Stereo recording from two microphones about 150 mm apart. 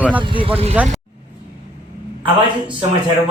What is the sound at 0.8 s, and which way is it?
Speech, 10° right (ahead or behind).